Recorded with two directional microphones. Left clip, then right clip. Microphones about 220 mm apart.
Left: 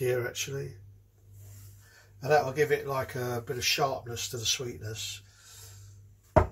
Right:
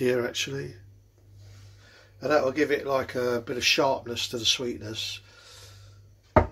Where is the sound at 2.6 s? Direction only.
45° right (ahead or behind).